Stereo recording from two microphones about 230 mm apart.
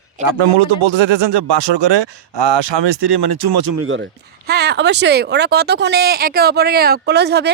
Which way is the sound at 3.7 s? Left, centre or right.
Right.